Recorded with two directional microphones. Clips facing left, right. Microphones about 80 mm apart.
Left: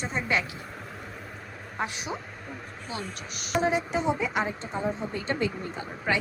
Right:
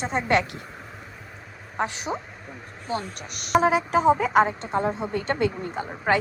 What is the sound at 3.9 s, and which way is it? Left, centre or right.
A woman's voice, right.